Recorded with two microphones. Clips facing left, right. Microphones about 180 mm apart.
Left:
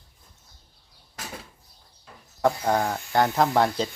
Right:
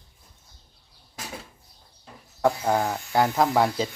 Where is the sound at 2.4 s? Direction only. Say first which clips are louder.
Even; 5° right (ahead or behind).